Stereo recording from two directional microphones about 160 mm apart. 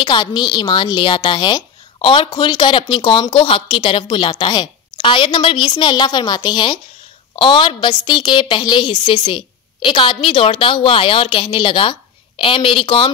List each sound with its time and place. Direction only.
0.0 s a woman's voice: 30° left (ahead or behind)